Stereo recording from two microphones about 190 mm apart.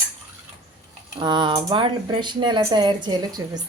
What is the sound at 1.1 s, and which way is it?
Speech, 25° right (ahead or behind).